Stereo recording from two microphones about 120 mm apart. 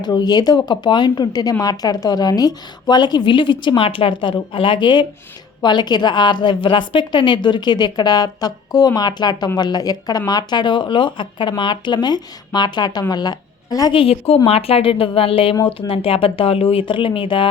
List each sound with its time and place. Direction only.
0.0 s a woman's voice: 35° left (ahead or behind)
13.9 s speech: 50° left (ahead or behind)